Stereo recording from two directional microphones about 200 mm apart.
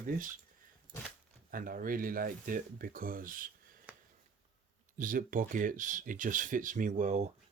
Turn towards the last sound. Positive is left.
turn(degrees=-35)  # may be behind; listen again after turning